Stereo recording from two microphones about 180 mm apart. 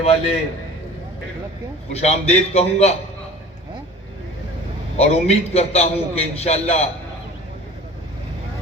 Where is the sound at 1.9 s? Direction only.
35° left (ahead or behind).